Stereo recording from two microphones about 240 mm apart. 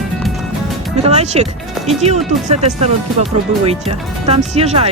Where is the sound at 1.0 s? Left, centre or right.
Right.